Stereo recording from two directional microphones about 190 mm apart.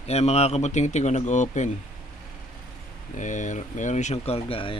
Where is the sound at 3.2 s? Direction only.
40° left (ahead or behind).